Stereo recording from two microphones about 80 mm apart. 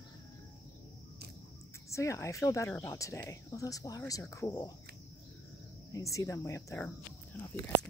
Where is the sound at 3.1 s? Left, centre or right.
Left.